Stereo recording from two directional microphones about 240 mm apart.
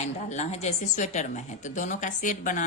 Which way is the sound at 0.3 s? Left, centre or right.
Left.